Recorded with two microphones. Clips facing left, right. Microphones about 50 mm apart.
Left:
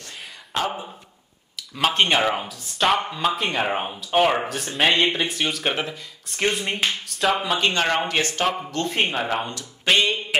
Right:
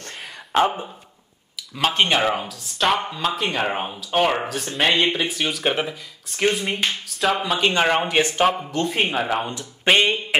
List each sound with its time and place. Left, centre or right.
1.8 s speech: centre
7.7 s speech: centre
8.8 s speech: centre
9.5 s speech: right